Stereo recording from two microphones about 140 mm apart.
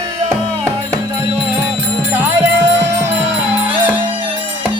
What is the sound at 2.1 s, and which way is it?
Music, 20° right (ahead or behind).